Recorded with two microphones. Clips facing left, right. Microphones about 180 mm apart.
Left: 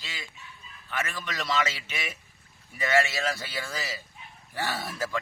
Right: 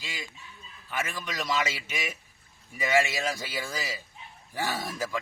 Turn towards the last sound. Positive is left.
turn(degrees=-10)  # may be behind; listen again after turning